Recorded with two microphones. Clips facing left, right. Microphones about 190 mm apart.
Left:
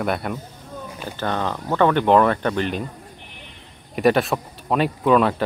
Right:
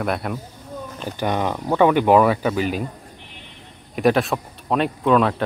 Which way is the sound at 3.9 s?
Centre (ahead or behind).